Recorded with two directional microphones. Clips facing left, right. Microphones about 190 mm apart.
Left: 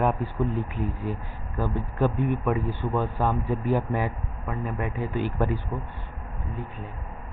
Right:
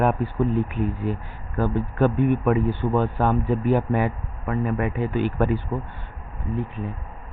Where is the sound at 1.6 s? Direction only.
65° right (ahead or behind).